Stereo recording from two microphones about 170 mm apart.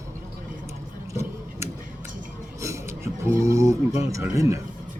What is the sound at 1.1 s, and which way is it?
Tick-tock, 15° right (ahead or behind).